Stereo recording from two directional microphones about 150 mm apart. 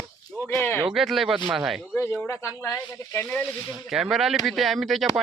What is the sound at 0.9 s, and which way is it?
Speech, centre (ahead or behind).